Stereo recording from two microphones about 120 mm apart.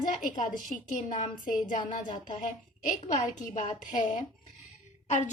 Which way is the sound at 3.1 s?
85° left.